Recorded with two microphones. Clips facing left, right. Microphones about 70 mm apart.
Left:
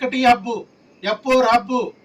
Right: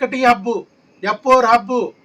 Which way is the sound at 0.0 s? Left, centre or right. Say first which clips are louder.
Right 1 dB; right.